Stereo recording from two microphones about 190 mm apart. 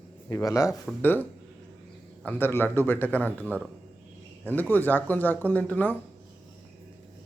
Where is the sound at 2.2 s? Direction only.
10° left (ahead or behind).